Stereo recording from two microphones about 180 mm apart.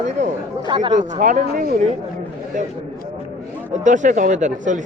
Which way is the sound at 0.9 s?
45° right (ahead or behind).